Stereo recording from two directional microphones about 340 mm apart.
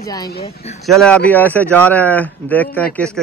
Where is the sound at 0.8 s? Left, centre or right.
Centre.